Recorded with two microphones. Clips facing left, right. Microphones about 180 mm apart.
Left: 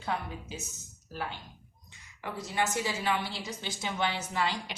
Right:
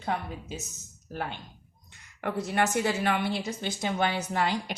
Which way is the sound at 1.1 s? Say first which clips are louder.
Right 3 dB; 50° right (ahead or behind).